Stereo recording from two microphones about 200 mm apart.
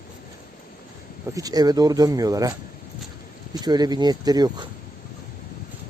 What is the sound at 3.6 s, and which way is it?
A man's voice, 20° right (ahead or behind).